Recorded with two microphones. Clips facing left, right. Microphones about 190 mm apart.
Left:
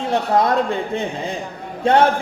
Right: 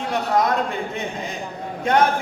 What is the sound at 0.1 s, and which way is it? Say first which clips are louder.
Music: left 3 dB; 30° left (ahead or behind).